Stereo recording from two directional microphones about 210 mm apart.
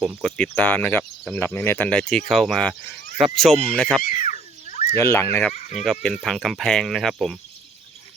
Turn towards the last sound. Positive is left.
turn(degrees=0)  # may be behind; listen again after turning